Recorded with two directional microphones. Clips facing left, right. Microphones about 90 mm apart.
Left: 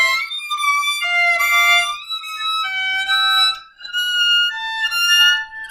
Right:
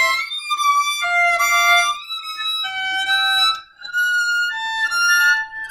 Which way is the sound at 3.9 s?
25° right (ahead or behind).